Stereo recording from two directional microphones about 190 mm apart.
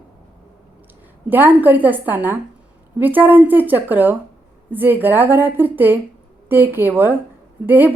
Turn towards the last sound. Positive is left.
turn(degrees=-10)  # may be behind; listen again after turning